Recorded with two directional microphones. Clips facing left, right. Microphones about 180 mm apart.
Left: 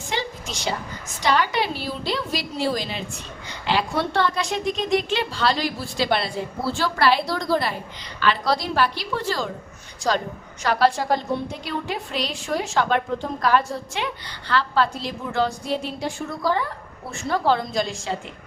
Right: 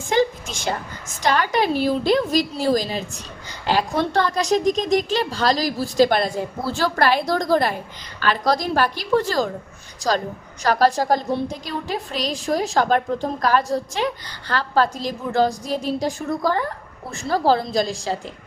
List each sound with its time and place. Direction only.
0.1 s a woman's voice: 50° right (ahead or behind)
10.0 s a woman's voice: centre (ahead or behind)
10.6 s a woman's voice: 40° right (ahead or behind)